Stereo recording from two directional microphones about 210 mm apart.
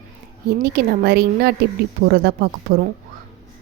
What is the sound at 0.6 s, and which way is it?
Speech, 50° right (ahead or behind).